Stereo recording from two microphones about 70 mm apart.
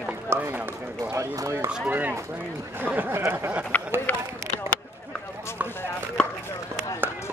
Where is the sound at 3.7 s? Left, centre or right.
Left.